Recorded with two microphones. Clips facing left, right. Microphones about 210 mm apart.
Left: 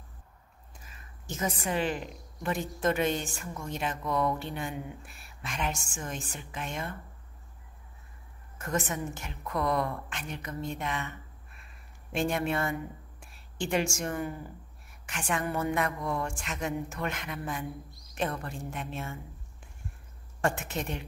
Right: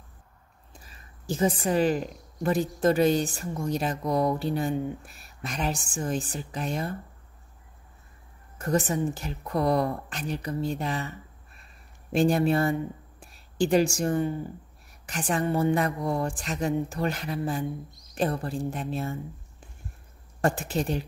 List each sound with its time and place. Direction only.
0.8 s a woman's voice: 35° right (ahead or behind)
8.5 s a woman's voice: 35° right (ahead or behind)
20.4 s a woman's voice: 35° right (ahead or behind)